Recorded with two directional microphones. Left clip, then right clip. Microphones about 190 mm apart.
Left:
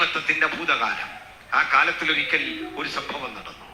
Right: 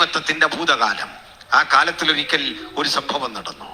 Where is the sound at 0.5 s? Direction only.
20° right (ahead or behind).